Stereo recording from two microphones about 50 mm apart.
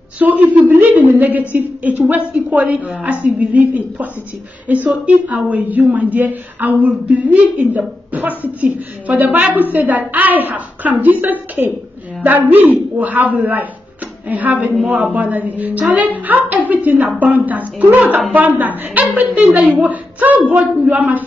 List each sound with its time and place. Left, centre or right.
0.2 s a woman's voice: right
19.5 s a woman's voice: right